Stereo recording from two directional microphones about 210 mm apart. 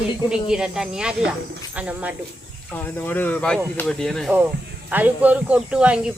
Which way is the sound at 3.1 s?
10° left (ahead or behind).